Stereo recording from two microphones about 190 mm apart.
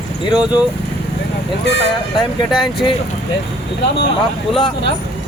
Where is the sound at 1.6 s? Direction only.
65° left (ahead or behind).